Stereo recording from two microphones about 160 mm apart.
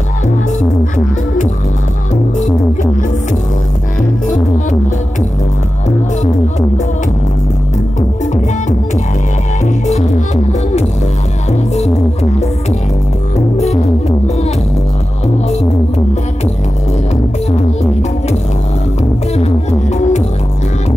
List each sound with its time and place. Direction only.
0.6 s music: 50° left (ahead or behind)
9.8 s music: 45° left (ahead or behind)
13.6 s music: 45° left (ahead or behind)
19.3 s music: 40° left (ahead or behind)